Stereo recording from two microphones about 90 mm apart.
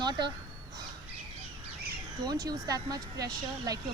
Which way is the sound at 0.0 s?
50° right (ahead or behind).